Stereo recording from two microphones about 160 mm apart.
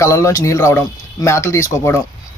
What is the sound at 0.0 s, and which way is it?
Speech, 20° left (ahead or behind).